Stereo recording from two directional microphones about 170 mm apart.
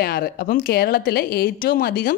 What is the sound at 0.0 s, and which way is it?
A woman's voice, 65° left (ahead or behind).